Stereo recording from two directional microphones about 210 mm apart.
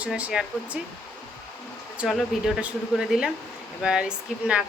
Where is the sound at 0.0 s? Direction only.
5° right (ahead or behind).